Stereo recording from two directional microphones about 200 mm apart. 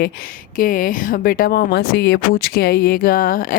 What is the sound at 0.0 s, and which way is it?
Speech, 45° left (ahead or behind).